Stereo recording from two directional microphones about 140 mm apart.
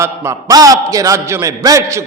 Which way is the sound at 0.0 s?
20° right (ahead or behind).